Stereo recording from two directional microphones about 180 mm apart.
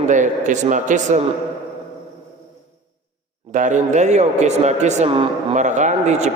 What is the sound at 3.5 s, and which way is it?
Speech, 45° right (ahead or behind).